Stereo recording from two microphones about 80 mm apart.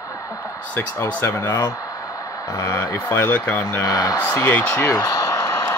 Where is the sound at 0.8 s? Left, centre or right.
Left.